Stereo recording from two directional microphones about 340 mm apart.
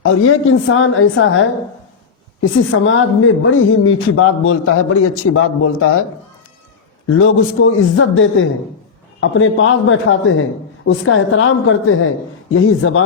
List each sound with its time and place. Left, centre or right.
0.0 s speech: left
7.2 s speech: left